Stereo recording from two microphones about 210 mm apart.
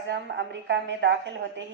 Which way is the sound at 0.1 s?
55° right (ahead or behind).